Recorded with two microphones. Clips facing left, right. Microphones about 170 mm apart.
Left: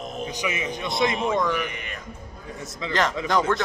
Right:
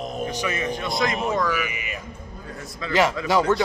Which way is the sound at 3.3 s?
5° right (ahead or behind).